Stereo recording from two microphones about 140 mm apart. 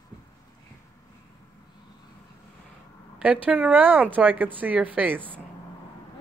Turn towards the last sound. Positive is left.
turn(degrees=-10)  # may be behind; listen again after turning